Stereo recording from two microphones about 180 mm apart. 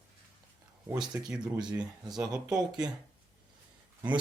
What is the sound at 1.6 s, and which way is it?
Speech, 25° right (ahead or behind).